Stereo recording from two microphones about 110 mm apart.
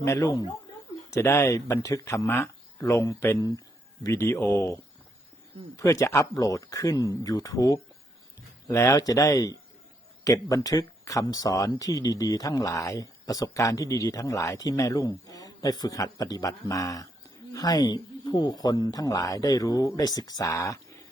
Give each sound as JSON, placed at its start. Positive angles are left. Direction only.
{"t": 0.0, "sound": "speech", "side_deg": 30}